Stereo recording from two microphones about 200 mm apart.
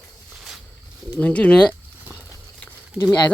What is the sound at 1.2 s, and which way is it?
Speech, 5° left (ahead or behind).